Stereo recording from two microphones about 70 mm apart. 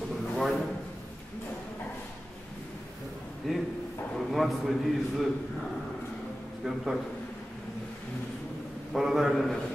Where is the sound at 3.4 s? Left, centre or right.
Centre.